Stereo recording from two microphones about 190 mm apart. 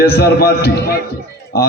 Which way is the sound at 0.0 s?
55° left (ahead or behind).